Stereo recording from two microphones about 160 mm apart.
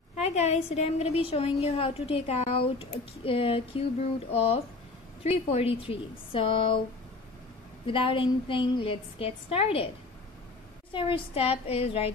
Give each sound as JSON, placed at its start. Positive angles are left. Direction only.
{"t": 0.1, "sound": "a woman's voice", "side_deg": 45}
{"t": 7.8, "sound": "a woman's voice", "side_deg": 35}
{"t": 10.9, "sound": "a woman's voice", "side_deg": 35}